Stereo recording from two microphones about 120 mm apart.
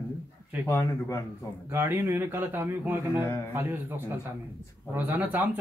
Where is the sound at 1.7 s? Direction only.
20° right (ahead or behind).